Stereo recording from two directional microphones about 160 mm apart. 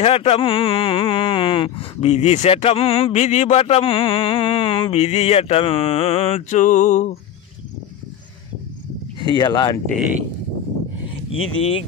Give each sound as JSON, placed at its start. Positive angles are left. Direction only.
{"t": 0.0, "sound": "speech", "side_deg": 40}
{"t": 9.2, "sound": "speech", "side_deg": 25}
{"t": 11.3, "sound": "speech", "side_deg": 35}